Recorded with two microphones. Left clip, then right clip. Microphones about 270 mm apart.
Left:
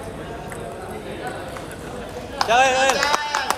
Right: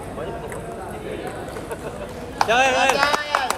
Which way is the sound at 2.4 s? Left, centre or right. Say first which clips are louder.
Left 1 dB; left.